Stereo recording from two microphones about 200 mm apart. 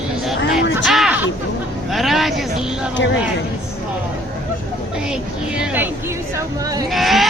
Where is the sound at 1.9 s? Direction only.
Centre (ahead or behind).